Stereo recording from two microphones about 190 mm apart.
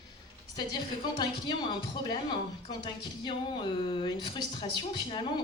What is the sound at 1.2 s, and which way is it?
A woman's voice, 25° left (ahead or behind).